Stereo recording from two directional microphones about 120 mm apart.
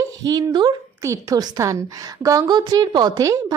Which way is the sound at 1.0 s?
25° right (ahead or behind).